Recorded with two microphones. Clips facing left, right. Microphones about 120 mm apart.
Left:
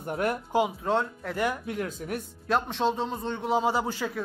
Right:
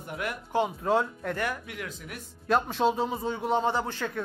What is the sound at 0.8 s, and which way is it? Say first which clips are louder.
Speech: right 1 dB; centre (ahead or behind).